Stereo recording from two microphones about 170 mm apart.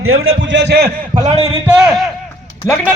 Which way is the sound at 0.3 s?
90° right.